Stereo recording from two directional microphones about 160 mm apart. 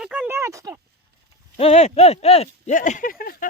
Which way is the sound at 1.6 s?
40° left (ahead or behind).